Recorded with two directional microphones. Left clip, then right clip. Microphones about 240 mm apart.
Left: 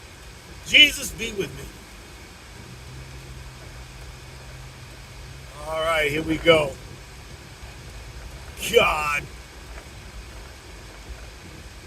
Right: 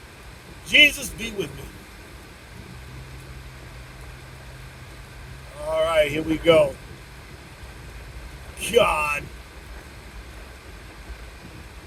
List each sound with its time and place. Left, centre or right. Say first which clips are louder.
0.7 s a man's voice: even; centre
5.7 s speech: right 2 dB; centre
8.6 s a man's voice: even; centre